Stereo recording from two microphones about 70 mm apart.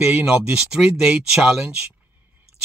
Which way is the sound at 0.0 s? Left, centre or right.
Centre.